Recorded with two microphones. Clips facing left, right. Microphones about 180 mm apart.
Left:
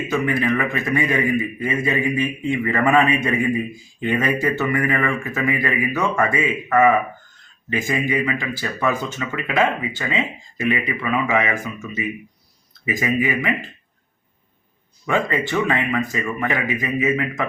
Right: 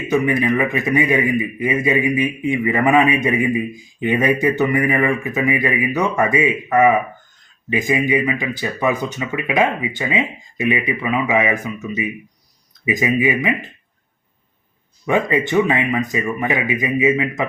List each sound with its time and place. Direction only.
0.1 s a man's voice: 15° right (ahead or behind)
15.0 s a man's voice: 15° right (ahead or behind)